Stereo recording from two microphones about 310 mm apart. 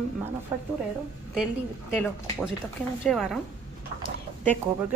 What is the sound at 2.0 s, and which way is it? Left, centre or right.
A woman's voice, centre.